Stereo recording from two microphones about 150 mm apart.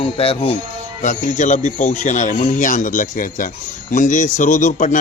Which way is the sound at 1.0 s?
55° left (ahead or behind).